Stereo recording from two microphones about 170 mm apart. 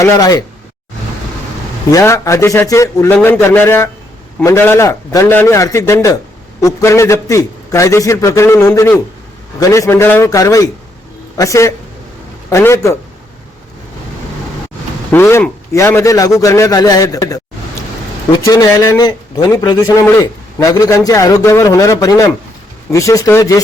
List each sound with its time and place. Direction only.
0.0 s a man's voice: 20° left (ahead or behind)
1.9 s a man's voice: 20° left (ahead or behind)
15.1 s a man's voice: 15° left (ahead or behind)